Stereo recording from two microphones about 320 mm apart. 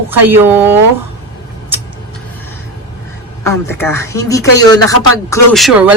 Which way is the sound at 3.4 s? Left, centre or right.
Centre.